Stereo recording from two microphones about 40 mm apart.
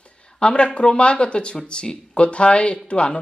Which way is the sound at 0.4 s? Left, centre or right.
Left.